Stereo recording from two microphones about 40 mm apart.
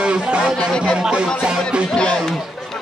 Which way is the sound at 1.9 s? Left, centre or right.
Left.